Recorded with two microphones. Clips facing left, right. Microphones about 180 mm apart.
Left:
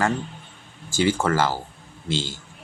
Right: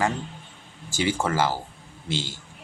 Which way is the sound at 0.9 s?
15° right (ahead or behind).